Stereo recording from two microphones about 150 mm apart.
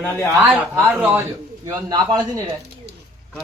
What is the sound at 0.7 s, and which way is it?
Speech, 15° right (ahead or behind).